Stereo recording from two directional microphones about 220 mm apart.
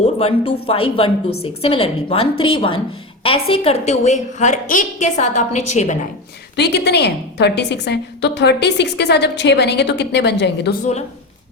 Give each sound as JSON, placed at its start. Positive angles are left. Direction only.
{"t": 0.0, "sound": "a woman's voice", "side_deg": 25}
{"t": 6.6, "sound": "a woman's voice", "side_deg": 50}